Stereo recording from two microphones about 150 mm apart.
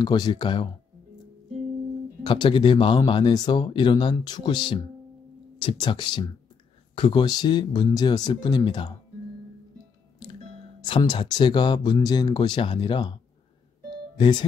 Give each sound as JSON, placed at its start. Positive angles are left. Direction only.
{"t": 0.0, "sound": "speech", "side_deg": 25}
{"t": 2.2, "sound": "speech", "side_deg": 30}
{"t": 10.8, "sound": "speech", "side_deg": 30}
{"t": 14.1, "sound": "speech", "side_deg": 30}